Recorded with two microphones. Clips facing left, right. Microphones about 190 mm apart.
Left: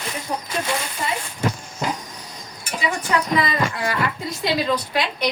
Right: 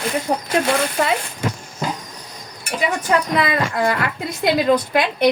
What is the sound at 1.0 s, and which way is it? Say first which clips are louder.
Speech: right 8 dB; 85° right.